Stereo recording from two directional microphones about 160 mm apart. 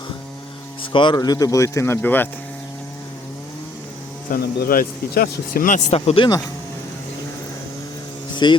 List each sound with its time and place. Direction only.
0.9 s speech: 30° left (ahead or behind); by 2.3 s 10° left (ahead or behind)
4.3 s a man's voice: 70° left (ahead or behind)
5.9 s speech: 35° left (ahead or behind)
8.4 s speech: 25° left (ahead or behind)